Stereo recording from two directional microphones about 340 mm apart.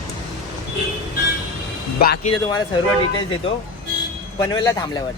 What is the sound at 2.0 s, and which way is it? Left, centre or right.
Speech, left.